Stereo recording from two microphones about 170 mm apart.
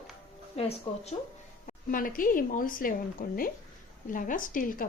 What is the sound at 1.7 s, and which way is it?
A woman's voice, 55° left (ahead or behind).